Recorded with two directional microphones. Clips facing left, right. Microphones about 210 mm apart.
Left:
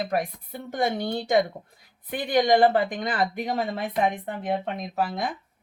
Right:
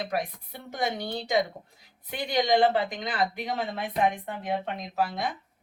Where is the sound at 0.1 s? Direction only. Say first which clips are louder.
Left 4 dB; 50° left (ahead or behind).